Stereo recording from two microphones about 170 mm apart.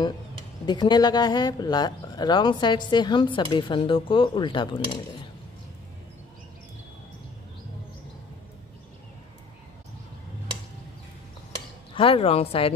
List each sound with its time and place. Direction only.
0.7 s speech: 25° left (ahead or behind)
11.9 s speech: 30° left (ahead or behind)